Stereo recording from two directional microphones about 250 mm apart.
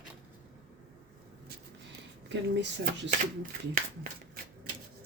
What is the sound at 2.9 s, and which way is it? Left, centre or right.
Speech, right.